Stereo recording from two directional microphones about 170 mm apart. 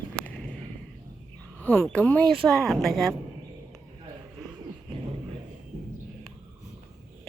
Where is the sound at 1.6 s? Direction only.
10° left (ahead or behind).